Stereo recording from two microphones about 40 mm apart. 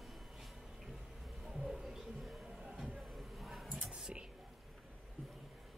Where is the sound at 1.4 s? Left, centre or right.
Centre.